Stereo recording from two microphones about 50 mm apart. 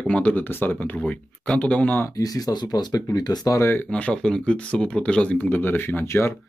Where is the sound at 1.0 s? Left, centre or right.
Left.